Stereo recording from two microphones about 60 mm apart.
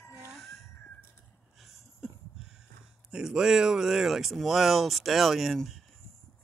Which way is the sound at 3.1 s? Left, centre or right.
Centre.